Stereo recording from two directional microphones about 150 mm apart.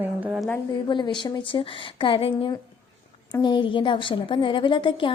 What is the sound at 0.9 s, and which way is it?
A woman's voice, 30° left (ahead or behind).